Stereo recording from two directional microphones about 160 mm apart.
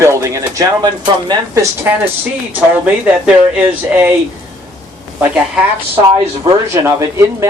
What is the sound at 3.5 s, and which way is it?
Speech, 10° right (ahead or behind).